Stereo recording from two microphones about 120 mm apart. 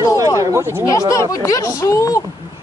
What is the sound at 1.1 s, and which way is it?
Speech, 25° left (ahead or behind).